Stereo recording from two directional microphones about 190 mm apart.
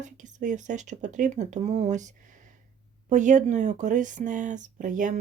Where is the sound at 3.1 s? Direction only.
40° right (ahead or behind).